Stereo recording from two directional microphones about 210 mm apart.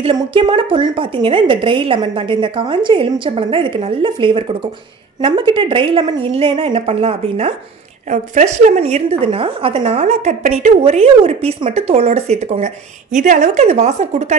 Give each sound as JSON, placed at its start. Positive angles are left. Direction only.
{"t": 0.0, "sound": "a woman's voice", "side_deg": -25}